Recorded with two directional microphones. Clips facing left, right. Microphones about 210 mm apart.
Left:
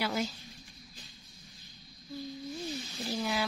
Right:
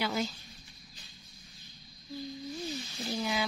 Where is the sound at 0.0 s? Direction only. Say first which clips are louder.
Even; 5° left (ahead or behind).